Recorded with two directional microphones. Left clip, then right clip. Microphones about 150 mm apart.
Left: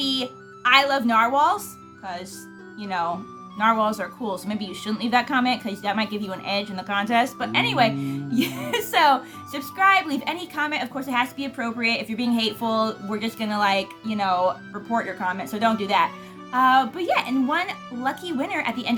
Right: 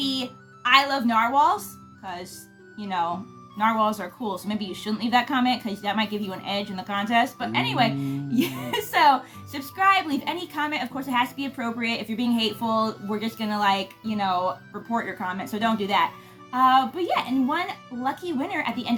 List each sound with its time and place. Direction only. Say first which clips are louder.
0.0 s speech: left 3 dB; 25° left (ahead or behind)
2.8 s speech: left 1 dB; 25° left (ahead or behind)